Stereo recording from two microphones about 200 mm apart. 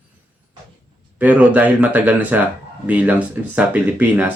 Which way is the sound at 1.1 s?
5° right (ahead or behind).